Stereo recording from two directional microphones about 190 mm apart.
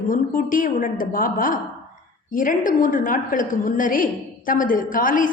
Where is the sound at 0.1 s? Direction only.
45° left (ahead or behind).